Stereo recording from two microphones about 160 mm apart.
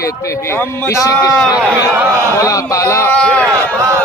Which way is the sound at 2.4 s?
20° left (ahead or behind).